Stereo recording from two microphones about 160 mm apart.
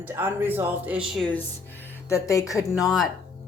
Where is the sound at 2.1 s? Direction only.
20° left (ahead or behind).